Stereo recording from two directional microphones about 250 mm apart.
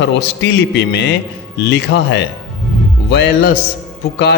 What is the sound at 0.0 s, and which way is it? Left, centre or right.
A man's voice, left.